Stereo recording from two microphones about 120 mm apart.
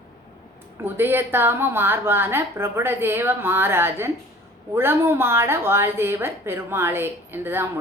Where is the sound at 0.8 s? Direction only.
15° right (ahead or behind).